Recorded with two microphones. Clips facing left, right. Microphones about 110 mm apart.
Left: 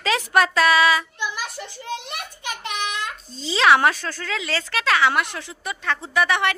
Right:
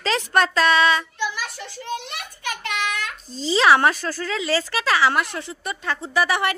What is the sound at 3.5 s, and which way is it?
Speech, centre (ahead or behind).